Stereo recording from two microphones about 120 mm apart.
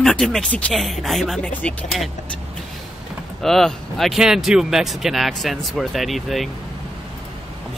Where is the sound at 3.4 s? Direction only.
5° left (ahead or behind).